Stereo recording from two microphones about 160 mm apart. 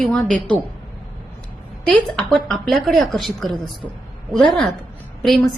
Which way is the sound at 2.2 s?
Centre (ahead or behind).